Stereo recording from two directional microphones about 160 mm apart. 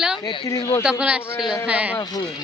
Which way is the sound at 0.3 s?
25° left (ahead or behind).